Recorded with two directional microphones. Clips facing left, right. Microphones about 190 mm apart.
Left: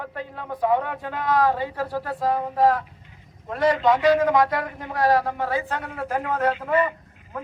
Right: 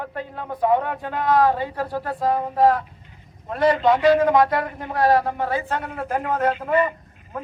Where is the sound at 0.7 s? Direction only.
50° right (ahead or behind).